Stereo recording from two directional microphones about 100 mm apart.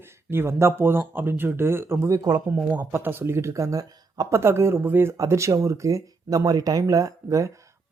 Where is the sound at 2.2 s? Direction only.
40° right (ahead or behind).